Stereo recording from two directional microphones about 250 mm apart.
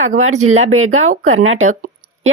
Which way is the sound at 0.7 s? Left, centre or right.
Right.